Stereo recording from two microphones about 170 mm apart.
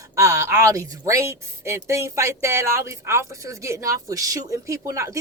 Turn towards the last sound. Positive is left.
turn(degrees=-20)  # may be behind; listen again after turning